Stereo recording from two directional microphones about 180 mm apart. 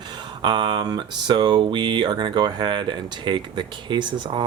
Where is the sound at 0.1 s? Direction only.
25° right (ahead or behind).